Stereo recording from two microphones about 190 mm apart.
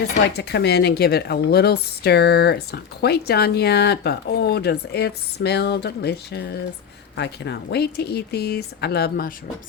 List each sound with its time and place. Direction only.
0.3 s speech: 60° left (ahead or behind)